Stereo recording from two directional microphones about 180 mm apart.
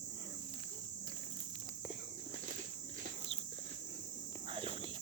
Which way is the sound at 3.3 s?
30° right (ahead or behind).